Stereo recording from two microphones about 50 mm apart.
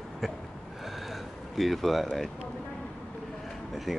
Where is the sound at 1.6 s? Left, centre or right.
Centre.